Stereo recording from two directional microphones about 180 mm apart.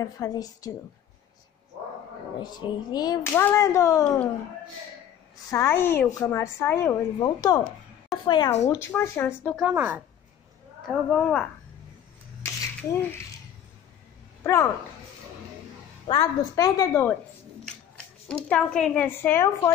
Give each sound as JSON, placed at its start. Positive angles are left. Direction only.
{"t": 0.0, "sound": "a woman's voice", "side_deg": 20}
{"t": 2.4, "sound": "a woman's voice", "side_deg": 25}
{"t": 5.5, "sound": "a woman's voice", "side_deg": 10}
{"t": 8.6, "sound": "a woman's voice", "side_deg": 15}
{"t": 9.8, "sound": "speech", "side_deg": -10}
{"t": 10.9, "sound": "speech", "side_deg": 5}
{"t": 12.4, "sound": "scissors", "side_deg": 15}
{"t": 14.4, "sound": "speech", "side_deg": 15}
{"t": 16.1, "sound": "a woman's voice", "side_deg": 20}